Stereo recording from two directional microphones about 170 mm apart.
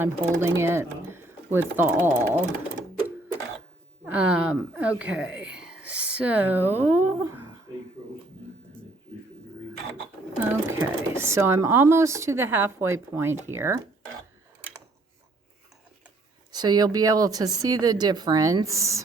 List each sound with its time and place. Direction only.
0.0 s a woman's voice: 15° right (ahead or behind)
4.0 s a woman's voice: 10° right (ahead or behind)
10.4 s a woman's voice: 15° right (ahead or behind)
16.5 s speech: 25° right (ahead or behind)